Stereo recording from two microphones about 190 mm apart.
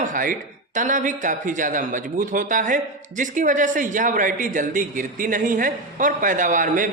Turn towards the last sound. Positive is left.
turn(degrees=-45)  # may be behind; listen again after turning